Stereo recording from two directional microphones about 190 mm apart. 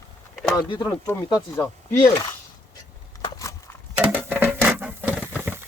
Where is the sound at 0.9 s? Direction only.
15° left (ahead or behind).